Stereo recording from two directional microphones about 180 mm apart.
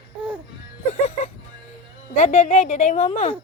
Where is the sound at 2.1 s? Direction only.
40° left (ahead or behind).